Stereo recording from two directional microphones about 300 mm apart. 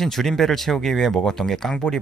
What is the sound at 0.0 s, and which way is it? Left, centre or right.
Speech, centre.